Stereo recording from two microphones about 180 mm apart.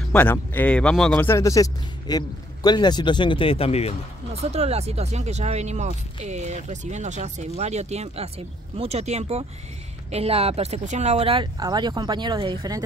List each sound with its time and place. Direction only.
0.1 s speech: 10° left (ahead or behind); by 3.9 s 35° left (ahead or behind)
4.4 s speech: 35° right (ahead or behind)